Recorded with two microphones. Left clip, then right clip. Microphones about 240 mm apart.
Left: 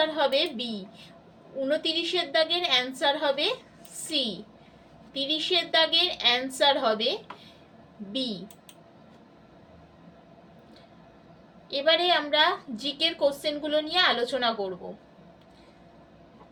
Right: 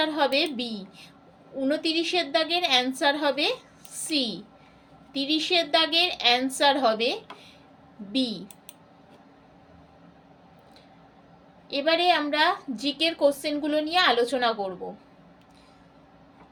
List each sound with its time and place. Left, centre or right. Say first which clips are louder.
0.0 s a woman's voice: right 1 dB; right
5.1 s a woman's voice: right 2 dB; right
11.7 s a woman's voice: right 1 dB; right